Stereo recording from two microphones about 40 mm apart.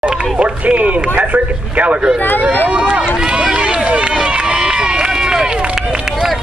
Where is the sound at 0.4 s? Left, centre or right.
Right.